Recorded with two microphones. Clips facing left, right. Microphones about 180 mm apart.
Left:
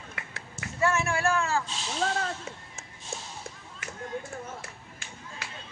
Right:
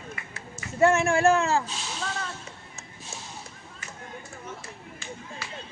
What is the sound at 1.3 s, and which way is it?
Speech, 25° right (ahead or behind).